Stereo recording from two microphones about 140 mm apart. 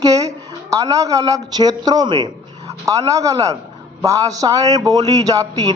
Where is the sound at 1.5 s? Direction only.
30° right (ahead or behind).